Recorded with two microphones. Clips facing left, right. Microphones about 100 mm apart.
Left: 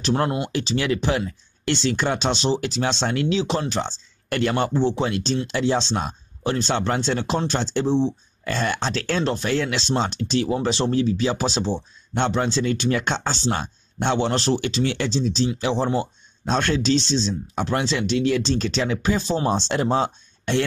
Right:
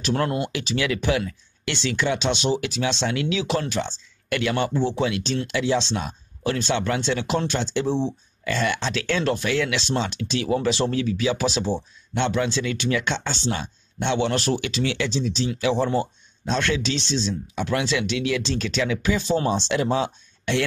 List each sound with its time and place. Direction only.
0.0 s speech: 30° left (ahead or behind)
0.5 s speech: 35° left (ahead or behind)
16.4 s speech: 45° left (ahead or behind)